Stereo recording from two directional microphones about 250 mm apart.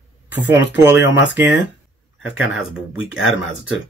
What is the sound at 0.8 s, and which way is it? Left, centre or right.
Speech, centre.